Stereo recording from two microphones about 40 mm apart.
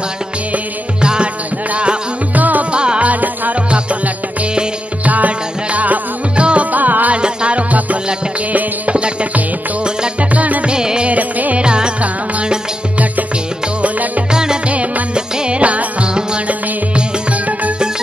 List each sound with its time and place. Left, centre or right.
1.0 s music: right
2.3 s music: right
2.7 s music: right
3.1 s music: right
7.2 s music: right
8.9 s music: right
10.3 s music: right
10.7 s music: centre
11.1 s music: right
11.5 s music: right
13.8 s music: right
14.3 s music: centre
14.7 s music: right
15.1 s music: right